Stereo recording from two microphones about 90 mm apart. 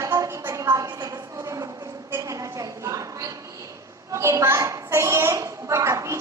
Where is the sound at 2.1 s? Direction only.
40° right (ahead or behind).